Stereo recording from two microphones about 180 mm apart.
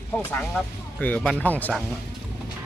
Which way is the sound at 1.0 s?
10° left (ahead or behind).